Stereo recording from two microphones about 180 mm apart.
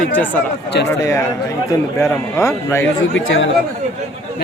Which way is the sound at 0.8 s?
65° left (ahead or behind).